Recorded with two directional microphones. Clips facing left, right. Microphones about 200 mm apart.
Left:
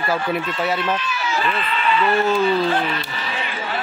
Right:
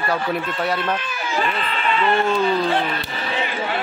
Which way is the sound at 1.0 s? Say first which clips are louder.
Even; 50° right (ahead or behind).